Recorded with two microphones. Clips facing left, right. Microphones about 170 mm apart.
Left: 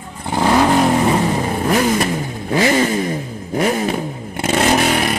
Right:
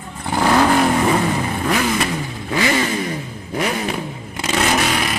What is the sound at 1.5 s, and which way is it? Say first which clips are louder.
Vehicle: left 3 dB; 40° left (ahead or behind).